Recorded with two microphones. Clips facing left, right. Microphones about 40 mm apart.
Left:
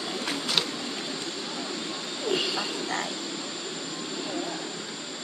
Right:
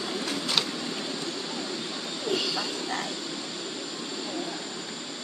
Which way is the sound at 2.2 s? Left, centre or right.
Centre.